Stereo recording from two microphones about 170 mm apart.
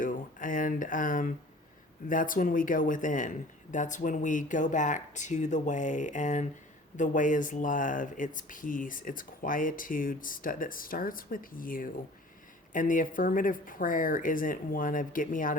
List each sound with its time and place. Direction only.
0.0 s speech: 50° left (ahead or behind)